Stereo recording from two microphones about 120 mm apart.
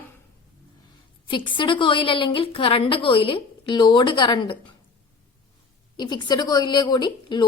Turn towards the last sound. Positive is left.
turn(degrees=40)  # may be behind; listen again after turning